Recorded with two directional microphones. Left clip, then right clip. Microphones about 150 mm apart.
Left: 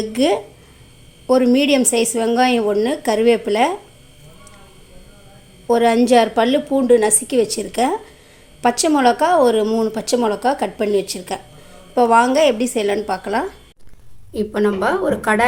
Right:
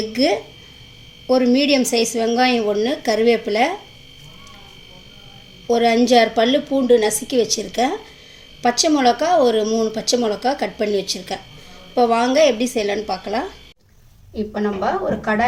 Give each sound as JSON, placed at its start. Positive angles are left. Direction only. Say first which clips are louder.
{"t": 0.1, "sound": "speech", "louder": "left 2 dB", "side_deg": 10}
{"t": 5.6, "sound": "speech", "louder": "left 1 dB", "side_deg": 5}
{"t": 14.3, "sound": "a woman's voice", "louder": "left 4 dB", "side_deg": 50}